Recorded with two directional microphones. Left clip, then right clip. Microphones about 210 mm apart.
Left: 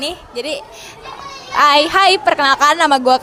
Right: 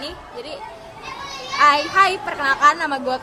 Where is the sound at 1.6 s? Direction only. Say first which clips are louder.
Left 4 dB; 40° left (ahead or behind).